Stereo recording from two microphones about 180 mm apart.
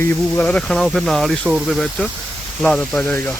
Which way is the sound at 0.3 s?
5° left (ahead or behind).